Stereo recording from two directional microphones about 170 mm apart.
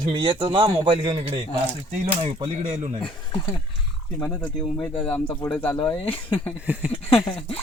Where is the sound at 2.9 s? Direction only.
30° left (ahead or behind).